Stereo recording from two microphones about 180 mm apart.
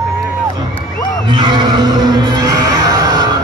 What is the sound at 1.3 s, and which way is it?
Speech, 25° right (ahead or behind).